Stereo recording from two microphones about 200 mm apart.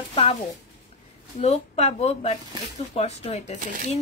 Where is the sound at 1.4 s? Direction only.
35° left (ahead or behind).